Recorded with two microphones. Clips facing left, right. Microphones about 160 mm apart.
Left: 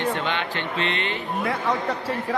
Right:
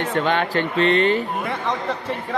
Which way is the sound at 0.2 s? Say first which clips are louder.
Right 7 dB; 45° right (ahead or behind).